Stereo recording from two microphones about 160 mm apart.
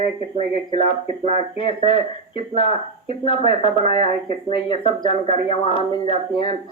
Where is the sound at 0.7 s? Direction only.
35° left (ahead or behind).